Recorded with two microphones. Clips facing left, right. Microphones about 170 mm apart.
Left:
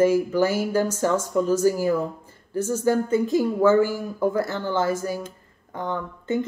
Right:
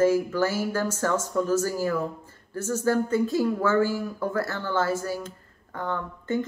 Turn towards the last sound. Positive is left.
turn(degrees=15)  # may be behind; listen again after turning